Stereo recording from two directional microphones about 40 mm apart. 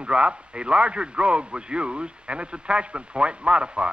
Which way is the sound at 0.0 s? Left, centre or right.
Right.